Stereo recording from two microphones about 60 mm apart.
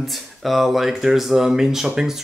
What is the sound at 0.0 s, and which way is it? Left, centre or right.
Speech, centre.